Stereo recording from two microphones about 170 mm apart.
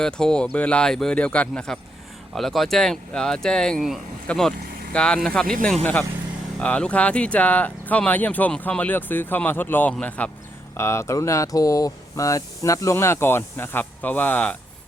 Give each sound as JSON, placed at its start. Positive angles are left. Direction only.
{"t": 0.0, "sound": "speech", "side_deg": 5}